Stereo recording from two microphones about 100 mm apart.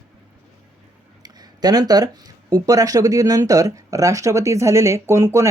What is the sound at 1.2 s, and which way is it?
Speech, 40° right (ahead or behind).